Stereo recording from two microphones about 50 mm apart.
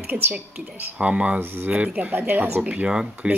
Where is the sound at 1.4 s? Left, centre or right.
Right.